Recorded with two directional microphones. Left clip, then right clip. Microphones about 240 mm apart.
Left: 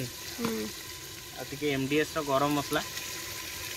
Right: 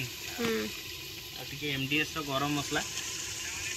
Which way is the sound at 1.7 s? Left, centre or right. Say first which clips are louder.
Left 2 dB; centre.